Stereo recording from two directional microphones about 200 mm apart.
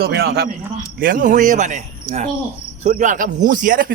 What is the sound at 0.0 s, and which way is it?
Speech, 50° right (ahead or behind).